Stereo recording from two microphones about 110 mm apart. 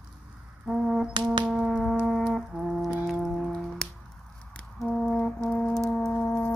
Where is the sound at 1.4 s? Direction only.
5° right (ahead or behind).